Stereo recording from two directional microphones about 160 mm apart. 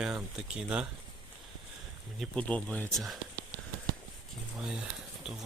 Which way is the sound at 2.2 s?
5° left (ahead or behind).